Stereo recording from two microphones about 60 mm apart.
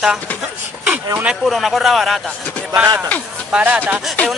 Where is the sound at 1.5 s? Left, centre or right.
Centre.